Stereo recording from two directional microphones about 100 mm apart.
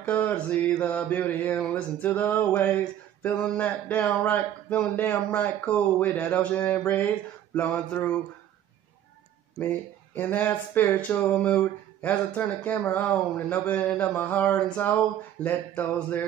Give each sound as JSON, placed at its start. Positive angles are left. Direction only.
{"t": 0.0, "sound": "mantra", "side_deg": 15}
{"t": 9.6, "sound": "speech", "side_deg": 20}
{"t": 13.9, "sound": "mantra", "side_deg": 15}